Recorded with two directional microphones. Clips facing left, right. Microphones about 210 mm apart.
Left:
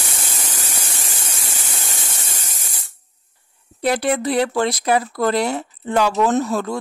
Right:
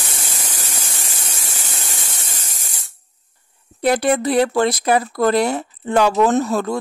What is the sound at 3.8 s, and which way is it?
Speech, 50° right (ahead or behind).